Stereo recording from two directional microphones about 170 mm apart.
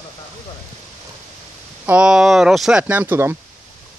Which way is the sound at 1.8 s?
5° right (ahead or behind).